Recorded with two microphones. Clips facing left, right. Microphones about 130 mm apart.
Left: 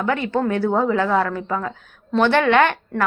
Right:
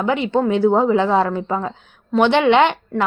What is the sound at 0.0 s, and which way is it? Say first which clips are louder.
A woman's voice: right 3 dB; 20° right (ahead or behind).